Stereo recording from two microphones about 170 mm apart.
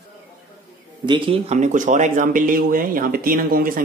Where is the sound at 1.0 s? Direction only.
30° right (ahead or behind).